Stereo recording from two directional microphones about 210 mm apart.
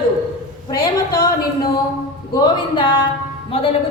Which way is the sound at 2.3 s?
25° left (ahead or behind).